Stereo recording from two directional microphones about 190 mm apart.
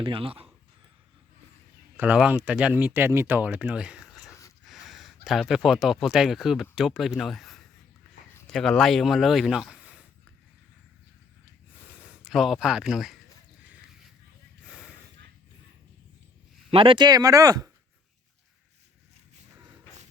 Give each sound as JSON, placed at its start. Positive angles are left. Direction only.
{"t": 0.0, "sound": "speech", "side_deg": -30}
{"t": 2.0, "sound": "speech", "side_deg": -5}
{"t": 12.2, "sound": "speech", "side_deg": 0}
{"t": 14.7, "sound": "snort", "side_deg": -5}
{"t": 16.7, "sound": "speech", "side_deg": -25}